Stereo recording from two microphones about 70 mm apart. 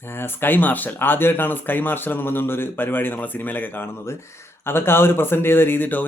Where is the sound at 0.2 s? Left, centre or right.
Left.